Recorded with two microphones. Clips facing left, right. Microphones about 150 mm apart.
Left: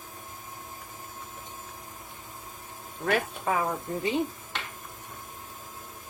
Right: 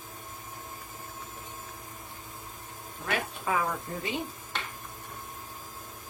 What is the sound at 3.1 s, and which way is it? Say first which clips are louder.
Speech: left 4 dB; 45° left (ahead or behind).